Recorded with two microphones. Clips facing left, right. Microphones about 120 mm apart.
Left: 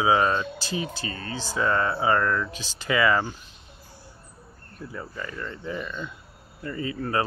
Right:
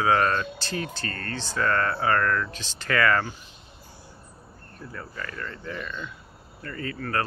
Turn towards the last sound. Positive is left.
turn(degrees=15)  # may be behind; listen again after turning